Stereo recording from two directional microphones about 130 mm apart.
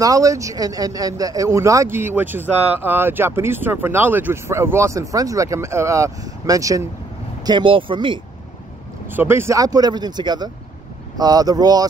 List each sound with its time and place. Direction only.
0.0 s speech: 25° right (ahead or behind)
7.4 s speech: 40° right (ahead or behind)
9.0 s speech: 15° right (ahead or behind)